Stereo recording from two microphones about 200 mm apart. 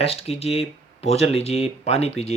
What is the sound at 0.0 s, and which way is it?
Speech, 30° left (ahead or behind).